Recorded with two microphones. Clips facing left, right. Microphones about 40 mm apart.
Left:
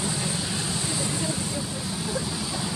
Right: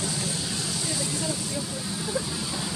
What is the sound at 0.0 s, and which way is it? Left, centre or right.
Vehicle, left.